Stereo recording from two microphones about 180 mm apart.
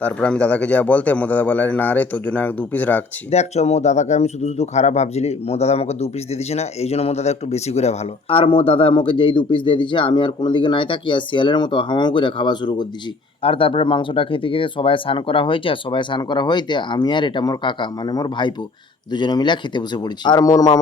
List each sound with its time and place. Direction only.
0.0 s a man's voice: 5° left (ahead or behind)
3.3 s speech: 35° left (ahead or behind); by 20.7 s 20° left (ahead or behind)